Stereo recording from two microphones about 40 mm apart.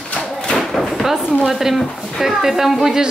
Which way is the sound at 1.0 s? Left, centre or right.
Centre.